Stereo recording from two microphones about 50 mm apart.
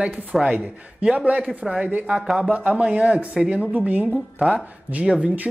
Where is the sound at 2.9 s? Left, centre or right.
Right.